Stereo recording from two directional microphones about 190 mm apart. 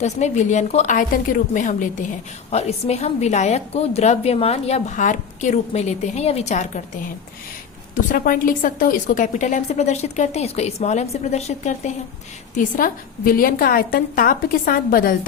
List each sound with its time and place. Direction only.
0.0 s a woman's voice: 40° left (ahead or behind)
8.1 s a woman's voice: 45° left (ahead or behind)